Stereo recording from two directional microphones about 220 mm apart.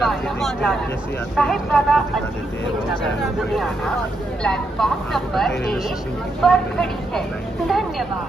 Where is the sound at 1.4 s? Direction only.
Centre (ahead or behind).